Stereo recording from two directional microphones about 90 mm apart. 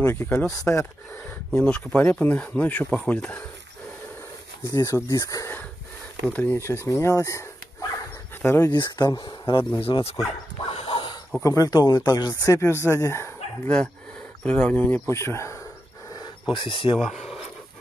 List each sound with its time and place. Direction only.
0.0 s speech: 25° left (ahead or behind)
1.5 s speech: 10° left (ahead or behind)
4.6 s speech: 35° left (ahead or behind)
6.5 s speech: 30° left (ahead or behind)
8.7 s speech: 55° left (ahead or behind)
9.8 s speech: 90° left
10.9 s dog: 75° left (ahead or behind)
11.4 s speech: 40° left (ahead or behind)
14.4 s speech: 15° left (ahead or behind)
15.0 s speech: 30° left (ahead or behind)
16.5 s speech: 65° left (ahead or behind)
17.0 s speech: 5° right (ahead or behind)